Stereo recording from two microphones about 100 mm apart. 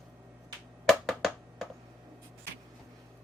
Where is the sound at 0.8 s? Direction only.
5° left (ahead or behind).